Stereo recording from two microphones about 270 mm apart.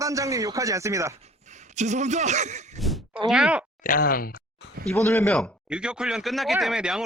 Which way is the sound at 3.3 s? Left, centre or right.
Centre.